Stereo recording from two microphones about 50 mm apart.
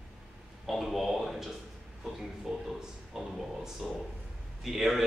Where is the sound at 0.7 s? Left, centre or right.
Centre.